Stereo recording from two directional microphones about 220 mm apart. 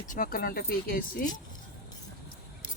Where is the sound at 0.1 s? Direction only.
40° left (ahead or behind).